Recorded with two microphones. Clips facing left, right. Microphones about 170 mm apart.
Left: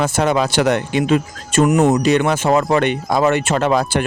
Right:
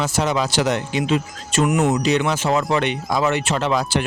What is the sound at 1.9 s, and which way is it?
Speech, 50° left (ahead or behind).